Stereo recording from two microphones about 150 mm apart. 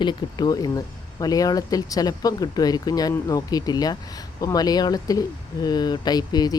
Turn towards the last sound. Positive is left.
turn(degrees=25)  # may be behind; listen again after turning